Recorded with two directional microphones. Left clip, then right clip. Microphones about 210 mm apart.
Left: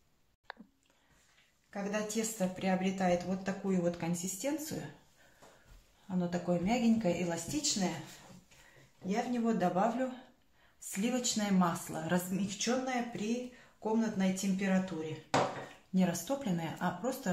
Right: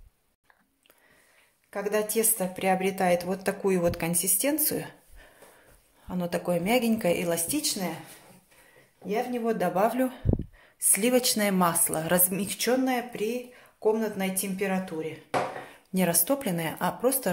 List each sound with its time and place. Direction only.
1.7 s a woman's voice: 45° right (ahead or behind)
6.0 s a woman's voice: 50° right (ahead or behind)
9.0 s a woman's voice: 35° right (ahead or behind)